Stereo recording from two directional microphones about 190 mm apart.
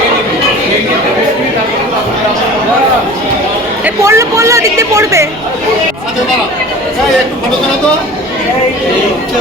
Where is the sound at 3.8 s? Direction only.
15° right (ahead or behind).